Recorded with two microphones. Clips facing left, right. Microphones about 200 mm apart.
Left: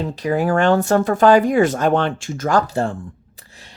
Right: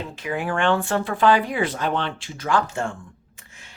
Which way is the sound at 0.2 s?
40° left (ahead or behind).